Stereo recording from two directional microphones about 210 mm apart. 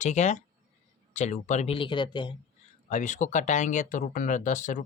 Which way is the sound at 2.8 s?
35° left (ahead or behind).